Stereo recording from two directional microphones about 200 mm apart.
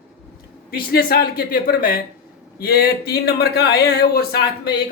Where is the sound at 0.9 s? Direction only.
50° left (ahead or behind).